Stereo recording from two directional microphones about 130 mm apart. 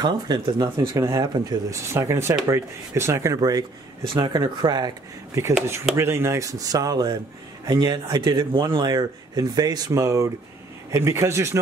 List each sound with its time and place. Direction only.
0.0 s speech: 30° right (ahead or behind)
2.0 s speech: 20° right (ahead or behind)
5.9 s speech: 20° right (ahead or behind)